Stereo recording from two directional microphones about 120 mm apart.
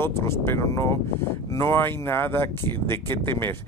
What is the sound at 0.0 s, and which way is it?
Speech, 20° left (ahead or behind).